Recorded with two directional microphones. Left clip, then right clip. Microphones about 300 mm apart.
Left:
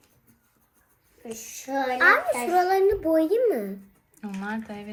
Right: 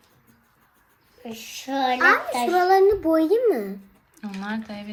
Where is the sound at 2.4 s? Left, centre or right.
Centre.